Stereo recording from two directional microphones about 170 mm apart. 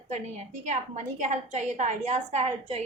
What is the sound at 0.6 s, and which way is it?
A woman's voice, 45° right (ahead or behind).